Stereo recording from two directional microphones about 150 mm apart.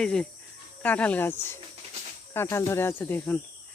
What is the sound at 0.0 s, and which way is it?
Speech, 5° left (ahead or behind).